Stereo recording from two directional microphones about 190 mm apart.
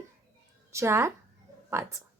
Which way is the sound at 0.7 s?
15° right (ahead or behind).